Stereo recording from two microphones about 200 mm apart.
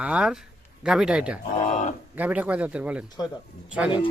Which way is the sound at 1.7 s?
40° left (ahead or behind).